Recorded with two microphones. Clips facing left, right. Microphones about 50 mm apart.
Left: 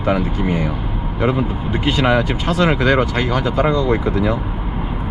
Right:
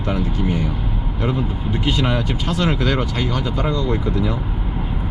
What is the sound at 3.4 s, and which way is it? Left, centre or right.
Speech, left.